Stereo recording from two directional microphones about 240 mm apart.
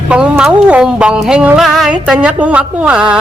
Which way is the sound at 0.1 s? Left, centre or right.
Centre.